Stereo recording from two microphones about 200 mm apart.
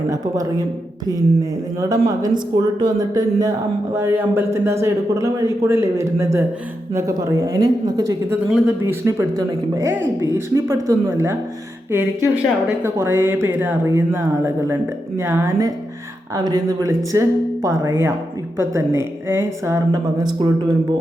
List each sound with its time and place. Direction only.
0.1 s speech: 15° right (ahead or behind)
1.8 s speech: 20° right (ahead or behind)
8.4 s speech: 5° right (ahead or behind); by 20.5 s 20° right (ahead or behind)